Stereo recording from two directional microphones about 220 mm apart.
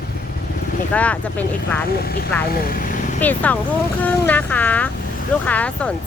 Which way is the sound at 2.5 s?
40° left (ahead or behind).